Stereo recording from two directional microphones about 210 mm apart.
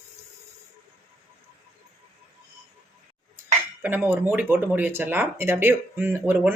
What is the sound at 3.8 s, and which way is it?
Speech, 10° right (ahead or behind).